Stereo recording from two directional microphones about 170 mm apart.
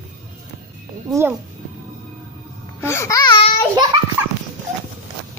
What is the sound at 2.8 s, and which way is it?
Babbling, 15° left (ahead or behind).